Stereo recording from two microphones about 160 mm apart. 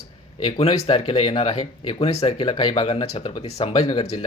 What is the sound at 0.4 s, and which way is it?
Speech, 35° left (ahead or behind).